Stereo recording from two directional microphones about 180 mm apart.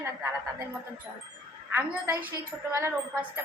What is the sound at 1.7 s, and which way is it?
A woman's voice, 10° right (ahead or behind).